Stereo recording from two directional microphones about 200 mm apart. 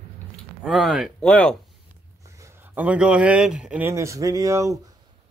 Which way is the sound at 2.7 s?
5° right (ahead or behind).